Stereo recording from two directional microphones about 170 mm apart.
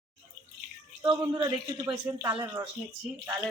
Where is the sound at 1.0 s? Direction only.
20° right (ahead or behind).